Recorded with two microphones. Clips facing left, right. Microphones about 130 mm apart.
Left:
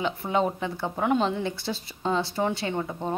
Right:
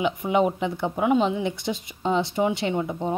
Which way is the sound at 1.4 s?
20° right (ahead or behind).